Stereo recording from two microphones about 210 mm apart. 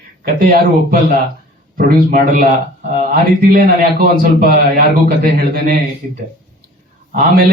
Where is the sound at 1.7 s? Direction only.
40° right (ahead or behind).